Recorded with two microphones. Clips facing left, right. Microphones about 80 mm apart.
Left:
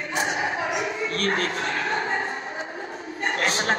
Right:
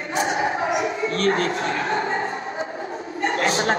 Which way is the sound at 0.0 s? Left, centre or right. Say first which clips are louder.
Right 3 dB; right.